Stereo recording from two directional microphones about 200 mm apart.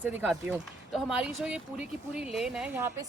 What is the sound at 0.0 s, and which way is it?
Speech, 10° right (ahead or behind).